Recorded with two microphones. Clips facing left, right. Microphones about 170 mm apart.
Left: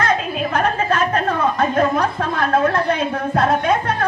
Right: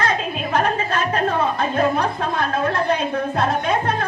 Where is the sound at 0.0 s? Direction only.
55° left (ahead or behind).